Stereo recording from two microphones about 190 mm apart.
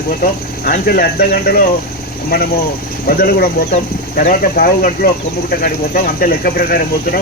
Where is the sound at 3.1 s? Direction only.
50° left (ahead or behind).